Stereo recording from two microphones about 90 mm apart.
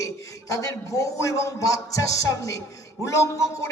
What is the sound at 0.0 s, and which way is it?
Speech, 40° left (ahead or behind).